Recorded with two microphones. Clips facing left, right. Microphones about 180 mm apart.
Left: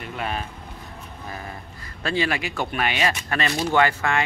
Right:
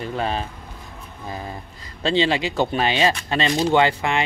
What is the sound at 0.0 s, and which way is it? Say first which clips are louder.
Speech: right 5 dB; 30° right (ahead or behind).